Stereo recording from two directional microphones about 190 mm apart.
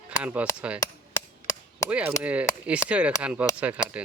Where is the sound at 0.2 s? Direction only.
5° right (ahead or behind).